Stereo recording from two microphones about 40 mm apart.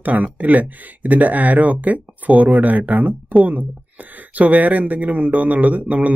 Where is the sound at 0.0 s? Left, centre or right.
Right.